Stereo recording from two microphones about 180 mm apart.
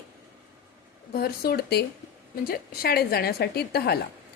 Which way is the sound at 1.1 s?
55° left (ahead or behind).